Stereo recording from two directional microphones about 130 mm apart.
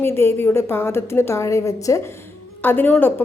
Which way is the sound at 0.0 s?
20° left (ahead or behind).